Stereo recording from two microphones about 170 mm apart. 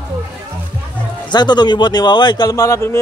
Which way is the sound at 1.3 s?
25° left (ahead or behind).